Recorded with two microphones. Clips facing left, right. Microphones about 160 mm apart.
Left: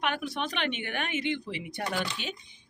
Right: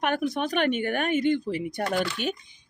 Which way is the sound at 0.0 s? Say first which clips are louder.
Right 5 dB; 45° right (ahead or behind).